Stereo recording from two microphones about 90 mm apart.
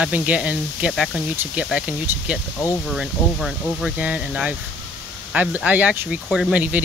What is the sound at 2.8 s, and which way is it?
Speech, centre (ahead or behind).